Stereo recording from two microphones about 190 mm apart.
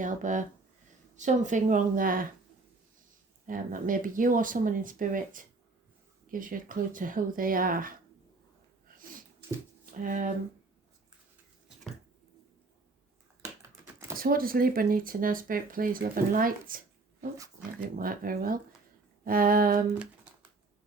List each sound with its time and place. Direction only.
0.0 s speech: 40° right (ahead or behind)
3.4 s speech: 45° right (ahead or behind)
9.0 s a sound: 45° right (ahead or behind)
10.0 s speech: 45° right (ahead or behind)
14.2 s speech: 50° right (ahead or behind)